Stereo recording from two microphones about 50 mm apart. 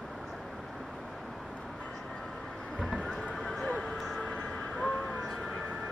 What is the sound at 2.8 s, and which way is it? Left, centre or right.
Horse, right.